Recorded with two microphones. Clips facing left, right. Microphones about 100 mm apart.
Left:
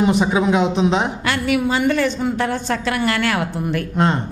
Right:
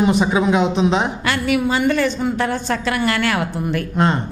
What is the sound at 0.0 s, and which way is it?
A woman's voice, 15° right (ahead or behind).